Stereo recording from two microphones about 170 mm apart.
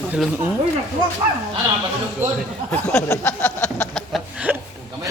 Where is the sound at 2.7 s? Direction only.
15° left (ahead or behind).